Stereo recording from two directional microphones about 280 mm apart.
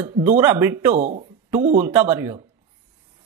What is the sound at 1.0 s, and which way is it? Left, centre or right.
Speech, right.